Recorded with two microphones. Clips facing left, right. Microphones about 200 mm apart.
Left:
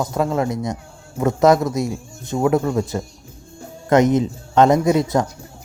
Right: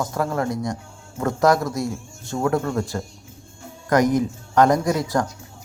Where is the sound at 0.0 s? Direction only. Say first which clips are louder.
Left 3 dB; 20° left (ahead or behind).